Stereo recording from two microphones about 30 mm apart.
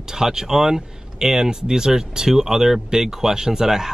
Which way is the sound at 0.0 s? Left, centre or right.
Centre.